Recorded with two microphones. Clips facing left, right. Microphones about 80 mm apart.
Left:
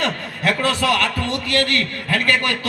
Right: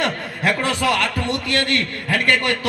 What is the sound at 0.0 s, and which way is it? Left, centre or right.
A man's voice, centre.